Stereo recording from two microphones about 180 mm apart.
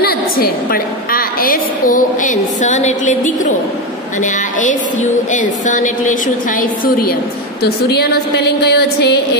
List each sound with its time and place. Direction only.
0.0 s a woman's voice: 55° left (ahead or behind)
7.6 s a woman's voice: 65° left (ahead or behind)